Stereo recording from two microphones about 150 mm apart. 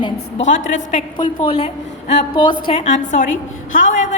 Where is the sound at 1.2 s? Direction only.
40° left (ahead or behind).